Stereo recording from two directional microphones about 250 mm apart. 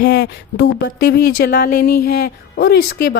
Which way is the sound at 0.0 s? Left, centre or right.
Left.